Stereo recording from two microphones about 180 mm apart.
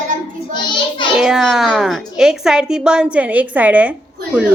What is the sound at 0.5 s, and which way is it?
Speech, 25° left (ahead or behind).